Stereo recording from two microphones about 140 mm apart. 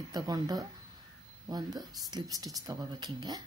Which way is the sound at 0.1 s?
30° right (ahead or behind).